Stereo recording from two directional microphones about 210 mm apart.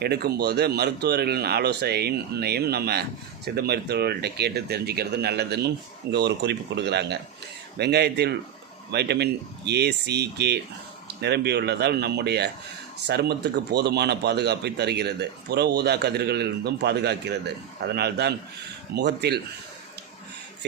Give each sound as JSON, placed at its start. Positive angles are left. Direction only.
{"t": 0.0, "sound": "speech", "side_deg": -50}